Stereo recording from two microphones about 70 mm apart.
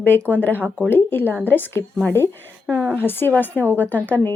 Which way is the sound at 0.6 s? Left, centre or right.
Right.